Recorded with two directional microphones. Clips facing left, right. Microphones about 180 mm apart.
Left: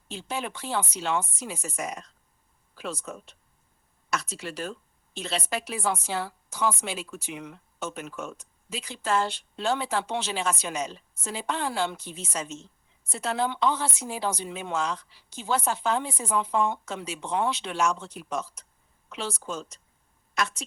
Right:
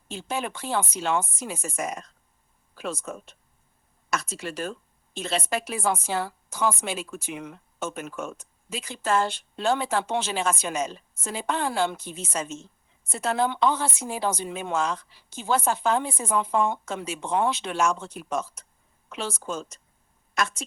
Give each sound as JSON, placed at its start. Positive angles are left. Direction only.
{"t": 0.1, "sound": "a woman's voice", "side_deg": -50}